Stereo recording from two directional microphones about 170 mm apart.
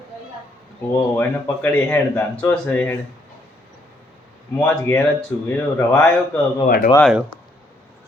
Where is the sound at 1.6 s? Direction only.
10° left (ahead or behind).